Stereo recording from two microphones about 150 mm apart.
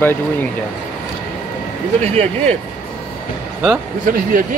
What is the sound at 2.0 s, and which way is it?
Speech, 45° right (ahead or behind).